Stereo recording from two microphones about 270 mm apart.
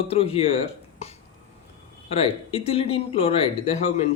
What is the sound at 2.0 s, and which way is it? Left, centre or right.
Speech, left.